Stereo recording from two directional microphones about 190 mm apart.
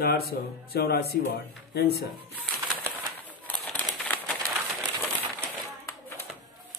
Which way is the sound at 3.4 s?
10° left (ahead or behind).